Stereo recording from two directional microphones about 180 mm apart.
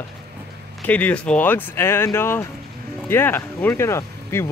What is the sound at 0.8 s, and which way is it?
Speech, 10° left (ahead or behind).